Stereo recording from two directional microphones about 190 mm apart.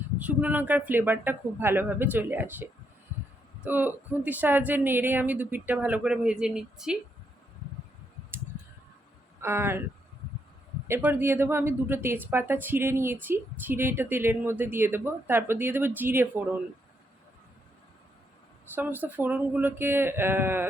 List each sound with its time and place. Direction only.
0.2 s a woman's voice: 5° right (ahead or behind)
9.4 s speech: 15° right (ahead or behind)
10.8 s a woman's voice: 10° right (ahead or behind)
18.7 s a woman's voice: 10° right (ahead or behind)